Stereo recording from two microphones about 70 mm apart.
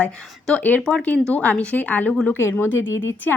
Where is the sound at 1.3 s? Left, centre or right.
Left.